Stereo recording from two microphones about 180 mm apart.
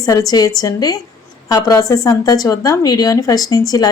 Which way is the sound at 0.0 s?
20° left (ahead or behind).